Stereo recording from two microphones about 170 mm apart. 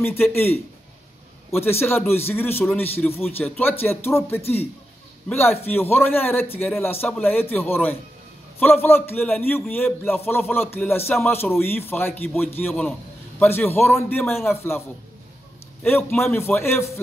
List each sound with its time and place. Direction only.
0.0 s a man's voice: 15° left (ahead or behind)
15.8 s a man's voice: 10° left (ahead or behind)